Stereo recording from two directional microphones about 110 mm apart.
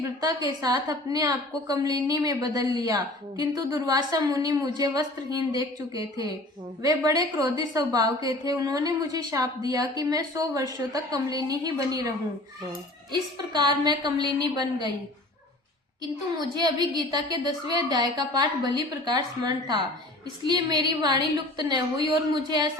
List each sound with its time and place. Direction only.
0.2 s a woman's voice: 35° right (ahead or behind)
13.5 s a woman's voice: 40° right (ahead or behind)
16.6 s a woman's voice: 40° right (ahead or behind)